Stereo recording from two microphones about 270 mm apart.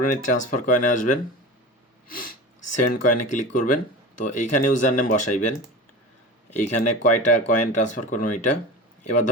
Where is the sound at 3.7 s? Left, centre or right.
Left.